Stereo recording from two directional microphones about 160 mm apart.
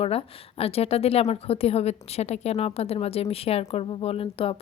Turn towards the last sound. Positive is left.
turn(degrees=35)  # may be behind; listen again after turning